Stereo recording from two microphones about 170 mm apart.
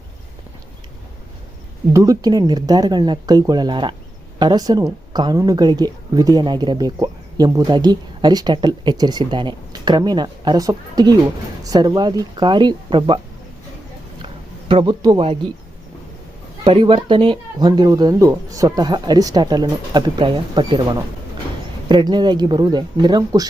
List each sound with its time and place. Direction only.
1.9 s speech: 20° right (ahead or behind)
14.7 s speech: 30° right (ahead or behind)
16.6 s speech: 30° right (ahead or behind)